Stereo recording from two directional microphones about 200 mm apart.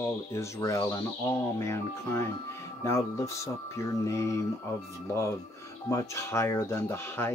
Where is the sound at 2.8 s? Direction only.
15° left (ahead or behind).